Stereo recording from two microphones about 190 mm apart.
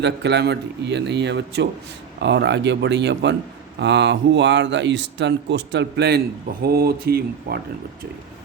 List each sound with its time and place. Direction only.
0.0 s a man's voice: 65° right (ahead or behind)